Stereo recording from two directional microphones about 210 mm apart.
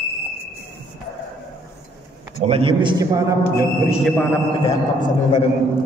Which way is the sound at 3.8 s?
Centre (ahead or behind).